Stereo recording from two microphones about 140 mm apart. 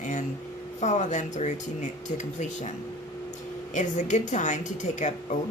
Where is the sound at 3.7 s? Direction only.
60° left (ahead or behind).